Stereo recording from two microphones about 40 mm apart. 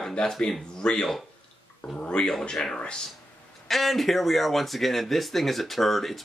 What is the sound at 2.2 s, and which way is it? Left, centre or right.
Speech, centre.